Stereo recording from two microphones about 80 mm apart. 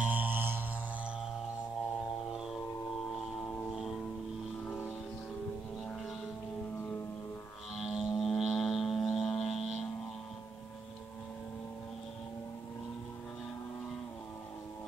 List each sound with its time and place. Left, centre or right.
0.0 s mantra: right
3.7 s music: centre
7.7 s music: centre